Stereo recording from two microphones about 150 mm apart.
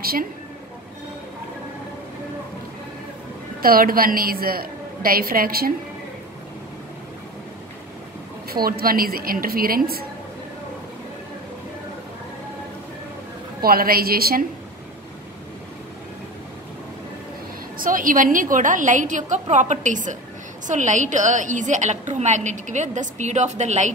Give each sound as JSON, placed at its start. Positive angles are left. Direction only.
{"t": 0.0, "sound": "a woman's voice", "side_deg": -80}
{"t": 3.6, "sound": "a woman's voice", "side_deg": -75}
{"t": 8.5, "sound": "a woman's voice", "side_deg": -85}
{"t": 13.6, "sound": "a woman's voice", "side_deg": -80}
{"t": 17.7, "sound": "a woman's voice", "side_deg": -65}